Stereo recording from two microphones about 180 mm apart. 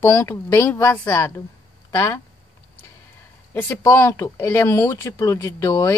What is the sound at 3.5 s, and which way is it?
Speech, 10° left (ahead or behind).